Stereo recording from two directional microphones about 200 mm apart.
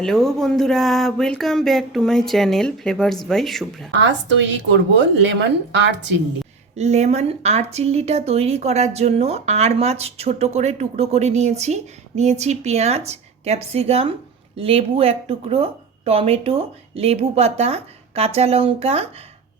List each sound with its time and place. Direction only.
0.0 s speech: centre (ahead or behind)
3.9 s speech: 65° right (ahead or behind)
6.7 s speech: 35° right (ahead or behind)